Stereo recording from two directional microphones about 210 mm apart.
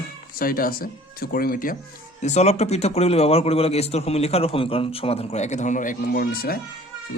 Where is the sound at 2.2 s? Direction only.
30° left (ahead or behind).